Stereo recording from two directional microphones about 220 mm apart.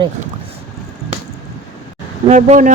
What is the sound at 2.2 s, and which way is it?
Speech, 35° right (ahead or behind).